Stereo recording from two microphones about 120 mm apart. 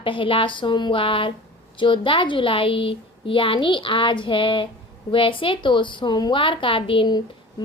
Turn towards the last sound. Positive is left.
turn(degrees=40)  # may be behind; listen again after turning